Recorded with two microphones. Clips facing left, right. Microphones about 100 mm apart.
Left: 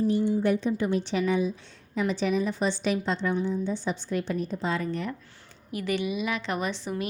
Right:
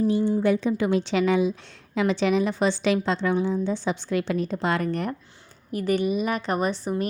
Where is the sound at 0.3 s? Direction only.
90° right; by 5.1 s 60° right (ahead or behind).